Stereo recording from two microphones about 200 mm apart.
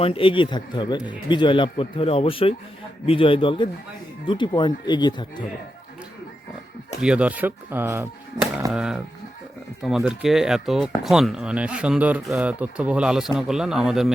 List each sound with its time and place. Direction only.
0.0 s speech: 25° left (ahead or behind)
7.0 s speech: 5° right (ahead or behind)